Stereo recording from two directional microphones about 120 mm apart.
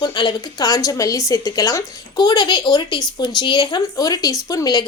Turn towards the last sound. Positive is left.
turn(degrees=30)  # may be behind; listen again after turning